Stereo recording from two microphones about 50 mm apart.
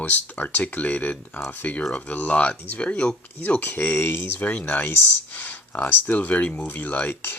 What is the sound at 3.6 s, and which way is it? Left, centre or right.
Speech, left.